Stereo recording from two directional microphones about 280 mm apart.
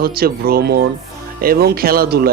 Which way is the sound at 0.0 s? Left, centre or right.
Right.